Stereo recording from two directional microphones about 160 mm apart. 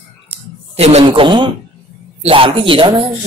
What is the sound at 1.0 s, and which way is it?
Speech, 30° right (ahead or behind).